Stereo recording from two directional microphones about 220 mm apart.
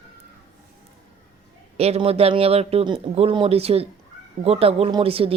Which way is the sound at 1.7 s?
30° right (ahead or behind).